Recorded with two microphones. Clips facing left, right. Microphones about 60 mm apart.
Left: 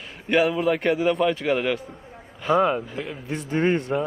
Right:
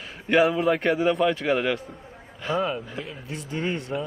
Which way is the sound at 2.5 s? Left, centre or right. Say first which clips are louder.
Left 6 dB; left.